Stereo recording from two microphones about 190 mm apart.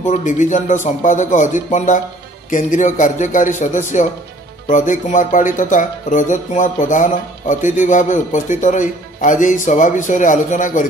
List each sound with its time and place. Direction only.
0.0 s speech: 40° left (ahead or behind)